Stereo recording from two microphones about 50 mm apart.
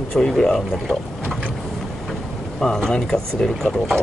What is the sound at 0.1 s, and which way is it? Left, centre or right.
Speech, centre.